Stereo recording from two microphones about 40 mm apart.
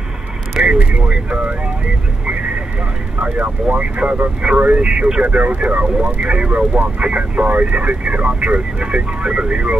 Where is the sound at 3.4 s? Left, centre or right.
Right.